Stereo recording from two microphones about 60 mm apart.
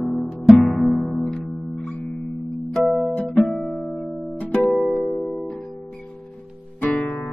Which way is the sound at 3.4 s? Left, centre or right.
Centre.